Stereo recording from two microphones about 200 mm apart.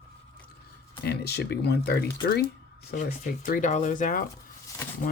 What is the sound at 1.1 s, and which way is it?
Speech, 55° left (ahead or behind).